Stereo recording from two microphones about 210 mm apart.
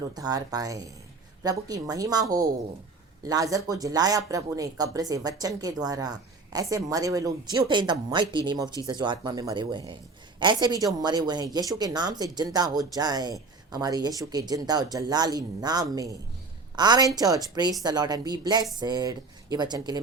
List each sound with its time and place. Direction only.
0.2 s speech: 20° right (ahead or behind)